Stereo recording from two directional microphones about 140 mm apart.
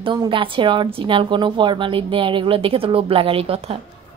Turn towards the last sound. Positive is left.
turn(degrees=-45)  # may be behind; listen again after turning